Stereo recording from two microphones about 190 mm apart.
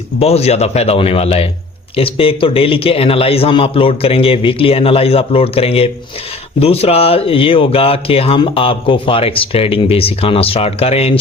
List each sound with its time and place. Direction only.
0.2 s speech: 35° left (ahead or behind)